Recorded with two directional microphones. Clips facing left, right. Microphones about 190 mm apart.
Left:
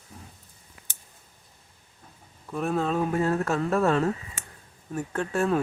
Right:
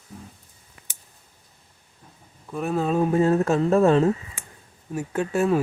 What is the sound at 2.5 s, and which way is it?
Speech, centre (ahead or behind).